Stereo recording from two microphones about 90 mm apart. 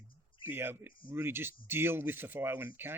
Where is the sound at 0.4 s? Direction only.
25° right (ahead or behind).